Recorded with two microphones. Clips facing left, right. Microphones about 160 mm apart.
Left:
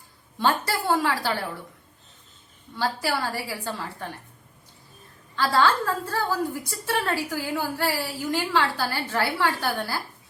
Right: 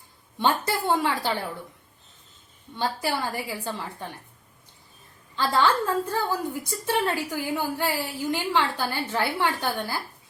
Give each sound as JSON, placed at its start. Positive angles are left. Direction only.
{"t": 0.3, "sound": "a woman's voice", "side_deg": -20}
{"t": 2.7, "sound": "a woman's voice", "side_deg": -20}
{"t": 5.4, "sound": "a woman's voice", "side_deg": -20}